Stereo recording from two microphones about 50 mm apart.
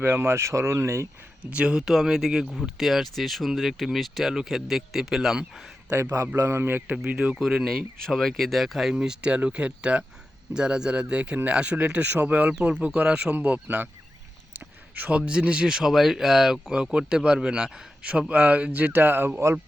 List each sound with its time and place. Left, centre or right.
0.2 s speech: right
1.5 s speech: right
6.3 s a man's voice: right
6.6 s speech: right
7.3 s speech: centre
7.7 s speech: centre
9.0 s speech: centre
13.3 s speech: right
15.1 s speech: right